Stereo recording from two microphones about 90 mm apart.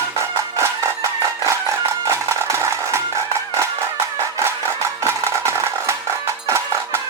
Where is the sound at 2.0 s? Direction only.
30° right (ahead or behind).